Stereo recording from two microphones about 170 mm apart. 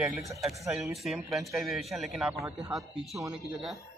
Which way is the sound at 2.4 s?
20° right (ahead or behind).